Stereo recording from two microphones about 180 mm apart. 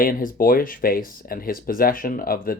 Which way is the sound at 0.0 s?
50° left (ahead or behind).